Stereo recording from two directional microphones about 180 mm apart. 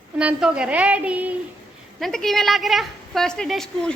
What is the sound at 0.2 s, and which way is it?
A woman's voice, 5° right (ahead or behind).